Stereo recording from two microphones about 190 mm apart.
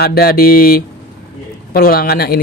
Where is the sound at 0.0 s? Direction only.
55° left (ahead or behind).